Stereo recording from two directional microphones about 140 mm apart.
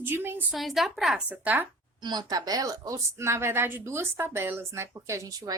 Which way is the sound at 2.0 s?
30° right (ahead or behind).